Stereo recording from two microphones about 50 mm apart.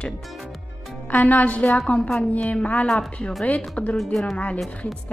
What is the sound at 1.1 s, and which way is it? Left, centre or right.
A woman's voice, left.